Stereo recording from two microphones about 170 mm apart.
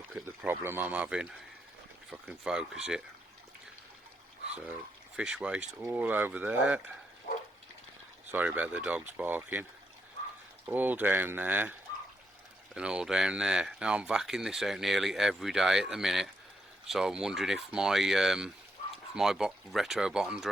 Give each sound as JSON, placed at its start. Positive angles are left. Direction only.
{"t": 0.1, "sound": "speech", "side_deg": -5}
{"t": 5.1, "sound": "speech", "side_deg": -5}
{"t": 7.3, "sound": "dog", "side_deg": 50}
{"t": 8.3, "sound": "speech", "side_deg": -10}
{"t": 10.7, "sound": "speech", "side_deg": -10}
{"t": 12.7, "sound": "speech", "side_deg": -5}